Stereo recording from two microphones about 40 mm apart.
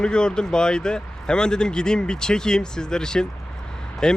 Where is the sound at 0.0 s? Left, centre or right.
Left.